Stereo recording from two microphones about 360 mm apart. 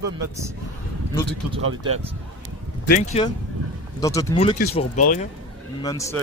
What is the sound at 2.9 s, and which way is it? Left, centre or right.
Speech, centre.